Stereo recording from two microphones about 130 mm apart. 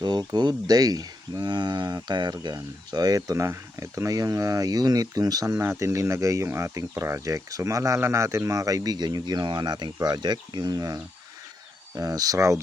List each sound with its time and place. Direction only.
0.0 s speech: 30° right (ahead or behind)